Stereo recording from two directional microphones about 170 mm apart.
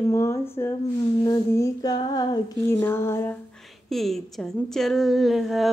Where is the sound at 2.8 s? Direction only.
15° left (ahead or behind).